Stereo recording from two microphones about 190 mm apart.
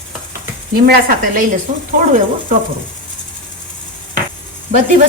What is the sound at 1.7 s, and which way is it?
Speech, 40° right (ahead or behind).